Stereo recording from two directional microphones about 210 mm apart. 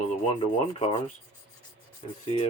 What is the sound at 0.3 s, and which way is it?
Rub, 25° left (ahead or behind).